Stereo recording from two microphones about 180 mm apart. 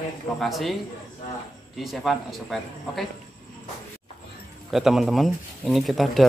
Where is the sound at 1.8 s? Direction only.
Centre (ahead or behind).